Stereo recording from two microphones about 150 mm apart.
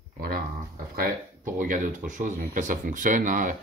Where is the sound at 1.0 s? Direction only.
65° right (ahead or behind).